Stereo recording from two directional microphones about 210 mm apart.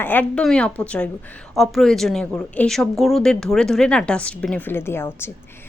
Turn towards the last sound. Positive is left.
turn(degrees=10)  # may be behind; listen again after turning